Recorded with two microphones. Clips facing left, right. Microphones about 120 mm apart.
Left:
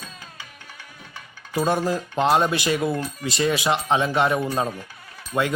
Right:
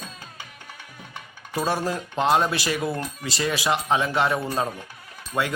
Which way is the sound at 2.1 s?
20° left (ahead or behind).